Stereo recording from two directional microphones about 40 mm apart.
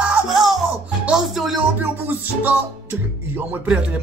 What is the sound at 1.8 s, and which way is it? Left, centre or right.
Speech, right.